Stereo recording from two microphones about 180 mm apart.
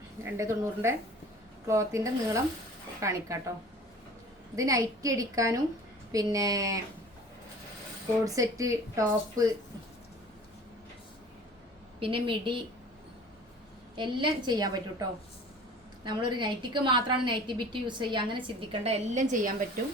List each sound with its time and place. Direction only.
0.2 s speech: 15° right (ahead or behind)
4.5 s a woman's voice: 20° right (ahead or behind)
8.2 s speech: 20° right (ahead or behind)
11.9 s a woman's voice: 30° right (ahead or behind)
13.9 s a woman's voice: 25° right (ahead or behind)
16.0 s a woman's voice: 25° right (ahead or behind); by 19.5 s 45° right (ahead or behind)